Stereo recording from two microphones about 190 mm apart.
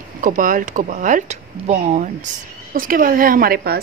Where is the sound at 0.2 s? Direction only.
45° right (ahead or behind).